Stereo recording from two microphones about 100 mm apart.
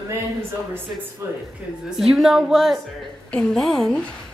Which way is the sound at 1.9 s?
Centre (ahead or behind).